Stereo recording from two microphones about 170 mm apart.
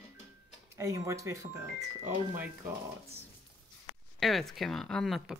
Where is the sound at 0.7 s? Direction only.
15° right (ahead or behind).